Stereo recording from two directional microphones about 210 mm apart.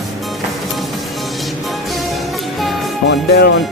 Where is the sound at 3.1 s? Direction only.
55° left (ahead or behind).